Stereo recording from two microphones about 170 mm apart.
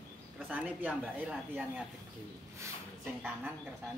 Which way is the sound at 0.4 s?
10° right (ahead or behind).